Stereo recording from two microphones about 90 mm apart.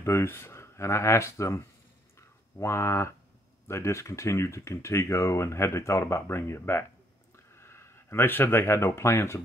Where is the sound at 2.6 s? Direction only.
30° left (ahead or behind).